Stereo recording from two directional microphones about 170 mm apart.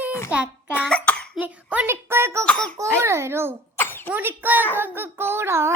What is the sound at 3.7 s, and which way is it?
Cough, 10° left (ahead or behind).